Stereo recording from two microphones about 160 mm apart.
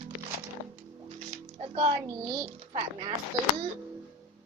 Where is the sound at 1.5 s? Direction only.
40° right (ahead or behind).